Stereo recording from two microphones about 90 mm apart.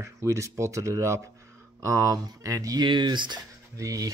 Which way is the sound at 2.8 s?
60° right (ahead or behind).